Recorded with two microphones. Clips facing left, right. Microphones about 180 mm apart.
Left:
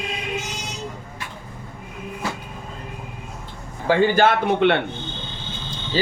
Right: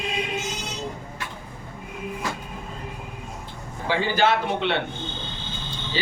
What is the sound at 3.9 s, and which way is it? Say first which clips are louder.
Speech: left 5 dB; 50° left (ahead or behind).